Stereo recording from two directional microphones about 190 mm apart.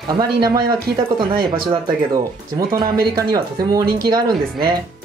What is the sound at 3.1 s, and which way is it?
Speech, 15° right (ahead or behind).